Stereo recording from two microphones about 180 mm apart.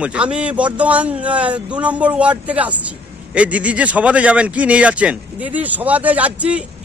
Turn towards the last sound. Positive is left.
turn(degrees=-5)  # may be behind; listen again after turning